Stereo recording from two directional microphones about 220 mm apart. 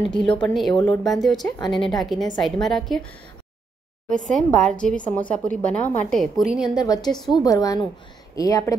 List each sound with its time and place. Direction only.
0.0 s speech: 5° left (ahead or behind)
4.3 s speech: centre (ahead or behind)
6.8 s a woman's voice: 20° left (ahead or behind)